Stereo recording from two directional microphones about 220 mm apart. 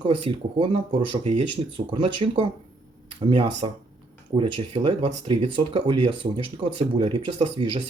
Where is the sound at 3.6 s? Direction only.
25° right (ahead or behind).